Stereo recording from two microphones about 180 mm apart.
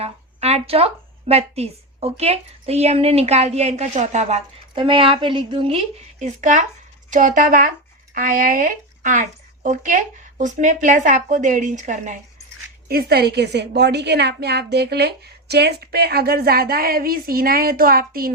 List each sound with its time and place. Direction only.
0.0 s speech: 35° right (ahead or behind)
12.9 s a woman's voice: 60° right (ahead or behind)